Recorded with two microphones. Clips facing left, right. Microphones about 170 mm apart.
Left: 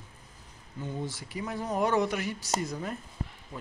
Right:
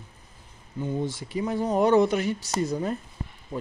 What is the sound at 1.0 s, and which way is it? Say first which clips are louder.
Speech: right 7 dB; 25° right (ahead or behind).